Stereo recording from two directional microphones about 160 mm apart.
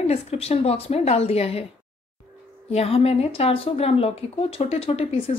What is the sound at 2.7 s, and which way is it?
A woman's voice, 40° left (ahead or behind).